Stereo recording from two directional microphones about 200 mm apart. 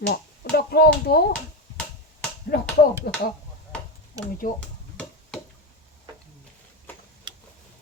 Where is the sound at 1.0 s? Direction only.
50° left (ahead or behind).